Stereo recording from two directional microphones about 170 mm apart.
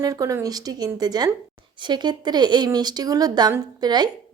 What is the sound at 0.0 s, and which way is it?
A woman's voice, 20° right (ahead or behind).